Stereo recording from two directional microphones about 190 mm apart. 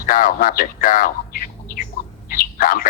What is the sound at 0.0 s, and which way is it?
Speech, 45° left (ahead or behind).